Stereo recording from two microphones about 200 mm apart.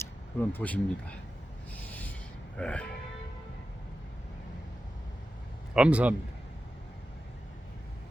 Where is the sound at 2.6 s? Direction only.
5° left (ahead or behind).